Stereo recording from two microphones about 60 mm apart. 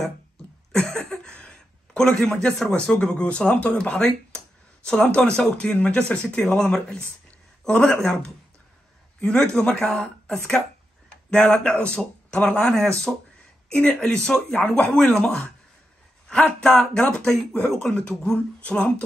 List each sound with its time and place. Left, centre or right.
0.7 s a man's voice: centre
7.2 s a sound: left
7.8 s speech: centre
9.2 s speech: centre
13.7 s speech: centre
16.6 s speech: centre